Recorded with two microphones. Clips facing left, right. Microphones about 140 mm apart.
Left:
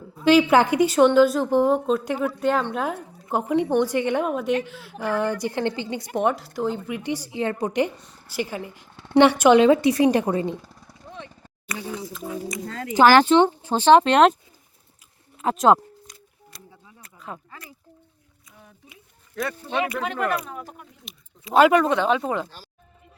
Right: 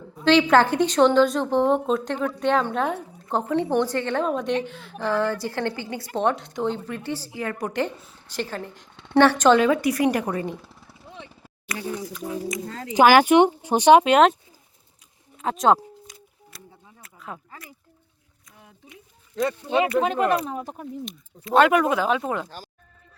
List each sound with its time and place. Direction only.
0.3 s a woman's voice: 10° left (ahead or behind)
6.2 s a woman's voice: 5° left (ahead or behind); by 7.9 s 20° left (ahead or behind)
7.9 s speech: 5° right (ahead or behind)
8.3 s a woman's voice: 10° left (ahead or behind)
10.6 s a sound: centre (ahead or behind)
12.6 s speech: 20° right (ahead or behind); by 14.3 s 5° right (ahead or behind)
15.4 s a sound: centre (ahead or behind)
19.4 s speech: 20° right (ahead or behind)
21.0 s speech: centre (ahead or behind)
22.4 s speech: 45° right (ahead or behind)